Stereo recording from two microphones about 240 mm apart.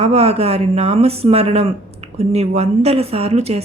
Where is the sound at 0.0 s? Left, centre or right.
Right.